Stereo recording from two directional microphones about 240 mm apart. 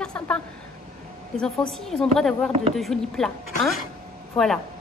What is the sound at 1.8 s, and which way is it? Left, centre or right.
A woman's voice, centre.